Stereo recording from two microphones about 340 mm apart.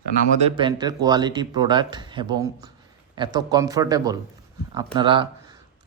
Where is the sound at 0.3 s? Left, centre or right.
Centre.